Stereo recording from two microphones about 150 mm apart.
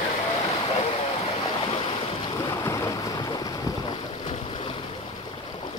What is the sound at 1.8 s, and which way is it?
Boat, 30° left (ahead or behind).